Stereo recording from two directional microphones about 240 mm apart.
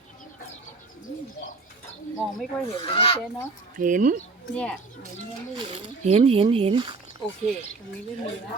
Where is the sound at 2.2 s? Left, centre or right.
Centre.